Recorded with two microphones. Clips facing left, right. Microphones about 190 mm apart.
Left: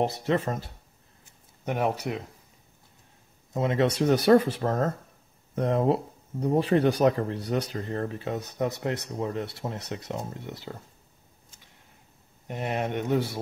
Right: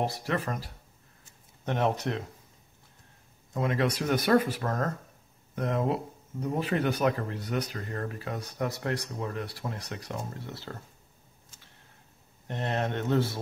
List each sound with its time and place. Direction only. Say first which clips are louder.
0.0 s speech: left 5 dB; 20° left (ahead or behind)
1.6 s speech: left 1 dB; 10° left (ahead or behind)
3.5 s speech: left 4 dB; 25° left (ahead or behind)
12.4 s speech: left 1 dB; 10° left (ahead or behind)